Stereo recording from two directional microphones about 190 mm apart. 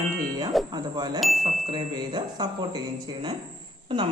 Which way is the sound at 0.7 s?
20° right (ahead or behind).